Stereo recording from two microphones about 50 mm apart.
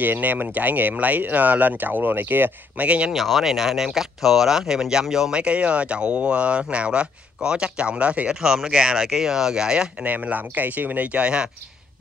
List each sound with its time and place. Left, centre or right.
0.0 s speech: right
3.2 s speech: centre
5.3 s speech: right
8.4 s speech: centre
10.0 s speech: right
11.1 s speech: centre